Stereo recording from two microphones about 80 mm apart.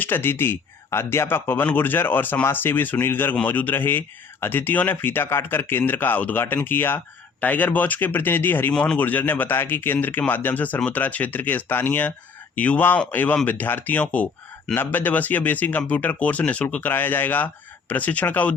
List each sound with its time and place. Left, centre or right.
0.0 s speech: left